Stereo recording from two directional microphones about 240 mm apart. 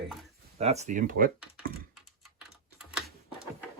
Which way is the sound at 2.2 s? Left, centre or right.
Centre.